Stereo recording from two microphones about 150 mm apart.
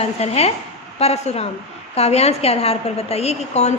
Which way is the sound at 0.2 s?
45° left (ahead or behind).